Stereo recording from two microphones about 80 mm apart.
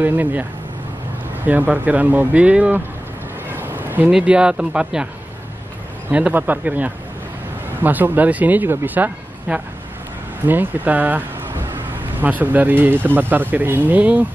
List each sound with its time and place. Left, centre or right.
0.0 s speech: right
3.5 s a sound: right
4.2 s speech: centre
6.0 s speech: centre